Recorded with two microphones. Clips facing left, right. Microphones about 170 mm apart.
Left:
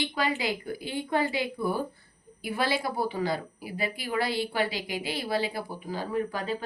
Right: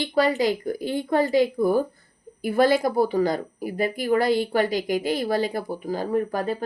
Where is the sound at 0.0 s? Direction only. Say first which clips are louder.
Right 8 dB; 40° right (ahead or behind).